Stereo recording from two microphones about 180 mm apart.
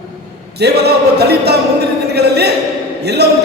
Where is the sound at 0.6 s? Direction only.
65° right (ahead or behind).